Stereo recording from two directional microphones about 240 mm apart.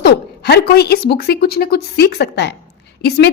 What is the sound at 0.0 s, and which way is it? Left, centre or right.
A woman's voice, left.